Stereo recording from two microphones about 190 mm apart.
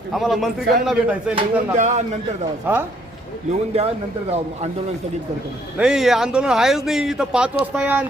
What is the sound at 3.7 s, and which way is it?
Speech, 35° right (ahead or behind).